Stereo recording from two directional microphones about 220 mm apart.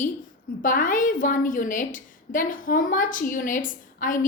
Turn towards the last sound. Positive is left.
turn(degrees=35)  # may be behind; listen again after turning